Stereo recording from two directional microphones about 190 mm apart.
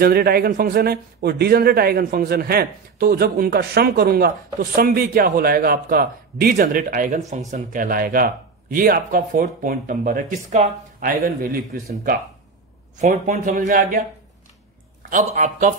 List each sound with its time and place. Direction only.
0.0 s speech: 55° right (ahead or behind)
13.0 s speech: 40° right (ahead or behind)
15.0 s speech: 40° right (ahead or behind)